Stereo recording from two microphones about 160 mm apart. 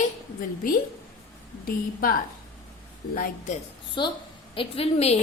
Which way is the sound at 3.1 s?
60° left (ahead or behind).